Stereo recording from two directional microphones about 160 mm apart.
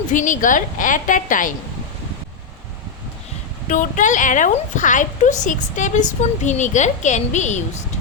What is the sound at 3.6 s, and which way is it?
A woman's voice, 55° left (ahead or behind).